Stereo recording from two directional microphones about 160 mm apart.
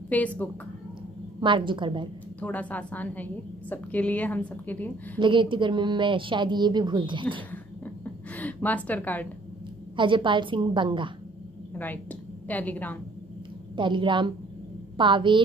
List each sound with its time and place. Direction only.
0.1 s a woman's voice: 10° left (ahead or behind)
1.4 s a woman's voice: 30° right (ahead or behind)
2.4 s a woman's voice: 10° left (ahead or behind)
5.2 s speech: 30° right (ahead or behind)
7.5 s a sound: 10° left (ahead or behind)
9.9 s a woman's voice: 30° right (ahead or behind)
11.8 s a woman's voice: 10° left (ahead or behind)
13.7 s a woman's voice: 30° right (ahead or behind)